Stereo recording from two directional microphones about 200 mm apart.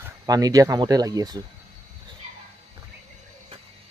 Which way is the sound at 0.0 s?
20° right (ahead or behind).